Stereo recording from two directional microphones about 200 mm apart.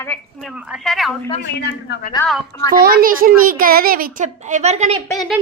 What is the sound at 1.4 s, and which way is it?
Speech, 60° left (ahead or behind).